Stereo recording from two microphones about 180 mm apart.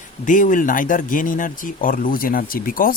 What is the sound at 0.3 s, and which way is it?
Speech, 45° left (ahead or behind).